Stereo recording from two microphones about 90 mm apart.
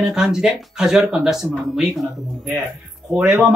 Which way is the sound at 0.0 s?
5° right (ahead or behind).